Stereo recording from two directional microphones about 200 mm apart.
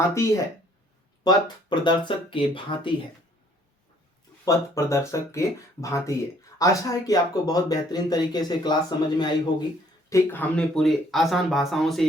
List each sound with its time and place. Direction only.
0.1 s speech: 15° left (ahead or behind)
4.4 s speech: 15° left (ahead or behind)